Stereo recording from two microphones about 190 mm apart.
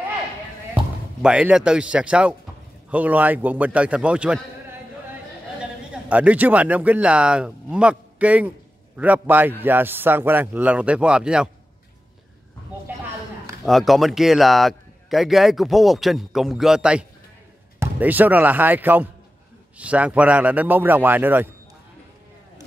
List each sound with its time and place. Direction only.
1.2 s a man's voice: 5° right (ahead or behind)
6.0 s speech: 10° right (ahead or behind)
13.7 s a man's voice: centre (ahead or behind)